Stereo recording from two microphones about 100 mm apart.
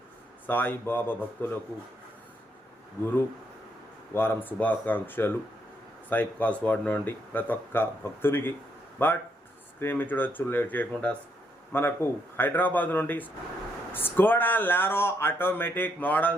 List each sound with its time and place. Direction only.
0.4 s speech: 20° left (ahead or behind)
4.1 s speech: 20° left (ahead or behind)